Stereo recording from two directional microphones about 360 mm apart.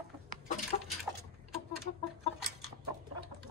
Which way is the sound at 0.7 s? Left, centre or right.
Centre.